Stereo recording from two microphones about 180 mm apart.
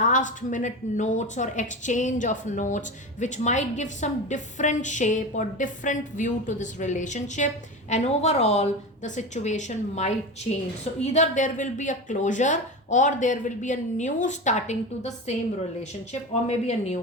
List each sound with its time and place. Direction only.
0.0 s a woman's voice: 45° left (ahead or behind)